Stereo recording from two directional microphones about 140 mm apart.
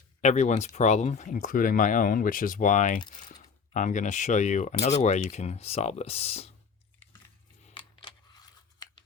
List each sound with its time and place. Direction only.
0.2 s speech: 55° left (ahead or behind)
7.0 s biting: 45° left (ahead or behind)
7.7 s coin: 35° left (ahead or behind)